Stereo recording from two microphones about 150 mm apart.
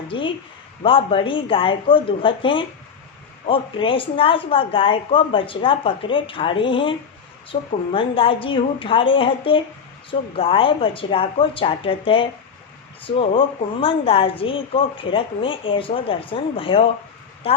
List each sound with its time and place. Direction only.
0.1 s a woman's voice: 35° left (ahead or behind)